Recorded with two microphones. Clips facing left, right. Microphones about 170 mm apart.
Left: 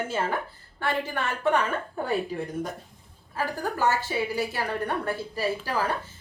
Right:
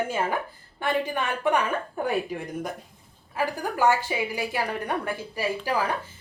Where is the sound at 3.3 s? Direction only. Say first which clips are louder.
Right 2 dB; 15° right (ahead or behind).